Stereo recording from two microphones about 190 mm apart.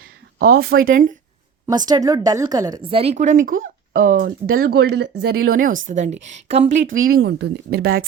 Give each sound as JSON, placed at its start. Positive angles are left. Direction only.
{"t": 0.3, "sound": "speech", "side_deg": -50}
{"t": 1.6, "sound": "a woman's voice", "side_deg": -20}
{"t": 7.1, "sound": "speech", "side_deg": -60}